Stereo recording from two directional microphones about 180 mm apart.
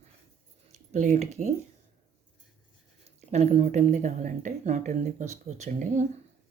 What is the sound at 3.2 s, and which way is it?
Speech, 35° right (ahead or behind).